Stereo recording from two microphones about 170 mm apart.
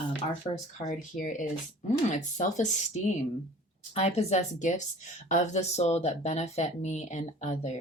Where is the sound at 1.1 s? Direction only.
50° left (ahead or behind).